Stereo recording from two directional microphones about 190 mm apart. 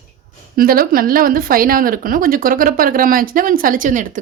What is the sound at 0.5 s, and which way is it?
Speech, 50° right (ahead or behind).